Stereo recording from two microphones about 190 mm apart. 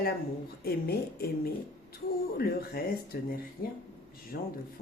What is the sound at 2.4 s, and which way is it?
Speech, 55° left (ahead or behind).